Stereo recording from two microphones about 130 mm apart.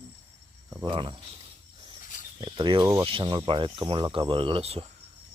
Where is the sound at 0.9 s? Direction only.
40° right (ahead or behind).